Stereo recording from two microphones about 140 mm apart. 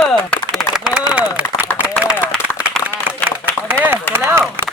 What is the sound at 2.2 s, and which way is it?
Applause, 15° left (ahead or behind).